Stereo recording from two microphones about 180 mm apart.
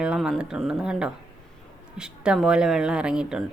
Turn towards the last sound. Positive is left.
turn(degrees=-5)  # may be behind; listen again after turning